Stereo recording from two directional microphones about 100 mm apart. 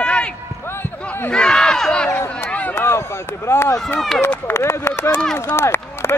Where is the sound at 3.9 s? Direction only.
5° left (ahead or behind).